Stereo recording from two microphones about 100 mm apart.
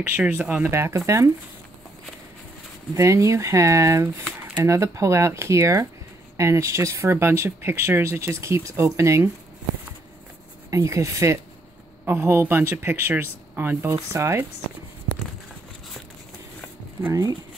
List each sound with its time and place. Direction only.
0.0 s speech: 20° right (ahead or behind)
2.9 s speech: 30° right (ahead or behind)
10.7 s speech: 30° right (ahead or behind)